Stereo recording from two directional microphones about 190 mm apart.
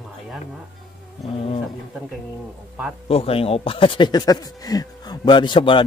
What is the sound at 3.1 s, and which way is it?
Speech, 30° left (ahead or behind).